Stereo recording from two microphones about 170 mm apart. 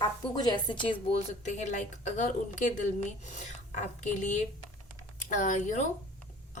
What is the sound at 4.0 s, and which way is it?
A woman's voice, 45° left (ahead or behind).